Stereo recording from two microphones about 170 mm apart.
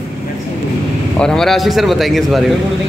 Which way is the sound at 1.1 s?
5° left (ahead or behind).